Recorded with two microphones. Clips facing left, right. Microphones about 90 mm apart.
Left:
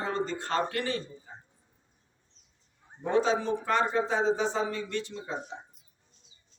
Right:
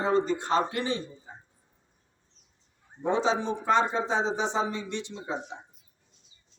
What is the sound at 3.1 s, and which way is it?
Speech, 20° right (ahead or behind).